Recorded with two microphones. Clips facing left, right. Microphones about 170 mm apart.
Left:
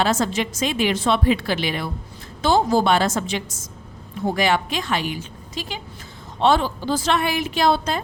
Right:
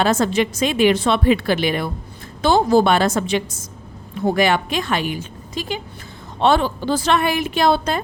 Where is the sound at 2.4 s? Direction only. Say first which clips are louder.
Right 3 dB; 60° right (ahead or behind).